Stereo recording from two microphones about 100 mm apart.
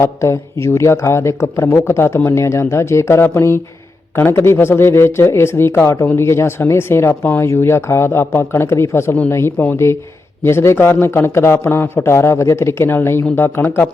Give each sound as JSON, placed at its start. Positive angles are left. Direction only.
{"t": 0.0, "sound": "speech", "side_deg": 25}
{"t": 7.4, "sound": "speech", "side_deg": 25}